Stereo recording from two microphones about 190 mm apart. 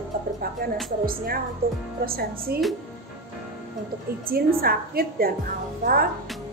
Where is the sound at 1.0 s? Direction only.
50° right (ahead or behind).